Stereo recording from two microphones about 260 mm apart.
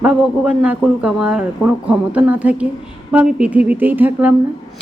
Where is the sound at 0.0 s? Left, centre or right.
Centre.